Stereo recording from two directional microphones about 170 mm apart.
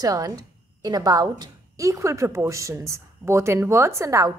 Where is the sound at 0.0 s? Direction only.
20° right (ahead or behind).